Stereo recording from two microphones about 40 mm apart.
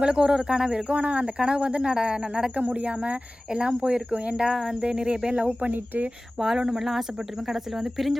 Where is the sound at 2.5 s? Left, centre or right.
Right.